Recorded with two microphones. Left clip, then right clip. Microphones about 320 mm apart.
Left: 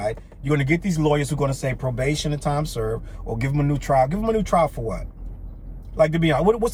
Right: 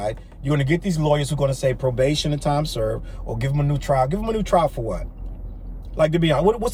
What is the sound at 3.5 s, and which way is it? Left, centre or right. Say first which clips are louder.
Speech: left 4 dB; centre.